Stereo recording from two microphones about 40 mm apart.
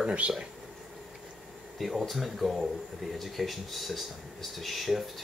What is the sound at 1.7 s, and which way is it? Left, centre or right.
Speech, centre.